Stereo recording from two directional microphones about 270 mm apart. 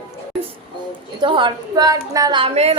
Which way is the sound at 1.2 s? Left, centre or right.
Centre.